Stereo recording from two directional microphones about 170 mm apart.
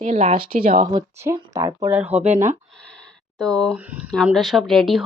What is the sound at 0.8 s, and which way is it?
Speech, 20° right (ahead or behind).